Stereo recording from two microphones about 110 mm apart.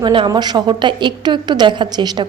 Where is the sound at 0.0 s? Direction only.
45° right (ahead or behind).